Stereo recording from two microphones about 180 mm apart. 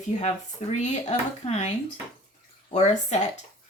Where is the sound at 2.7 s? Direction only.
40° left (ahead or behind).